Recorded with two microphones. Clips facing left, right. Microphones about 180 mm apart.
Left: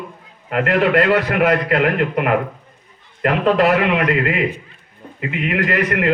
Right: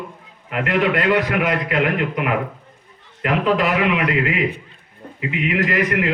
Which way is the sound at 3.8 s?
45° left (ahead or behind).